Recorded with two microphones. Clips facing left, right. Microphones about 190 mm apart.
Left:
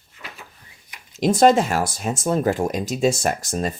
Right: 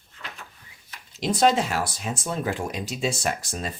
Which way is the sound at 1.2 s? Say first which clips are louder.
Left 6 dB; 45° left (ahead or behind).